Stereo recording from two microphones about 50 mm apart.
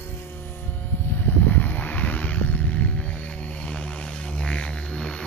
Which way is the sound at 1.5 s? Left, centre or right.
Left.